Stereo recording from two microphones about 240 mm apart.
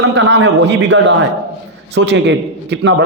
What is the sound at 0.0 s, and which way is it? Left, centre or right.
A man's voice, right.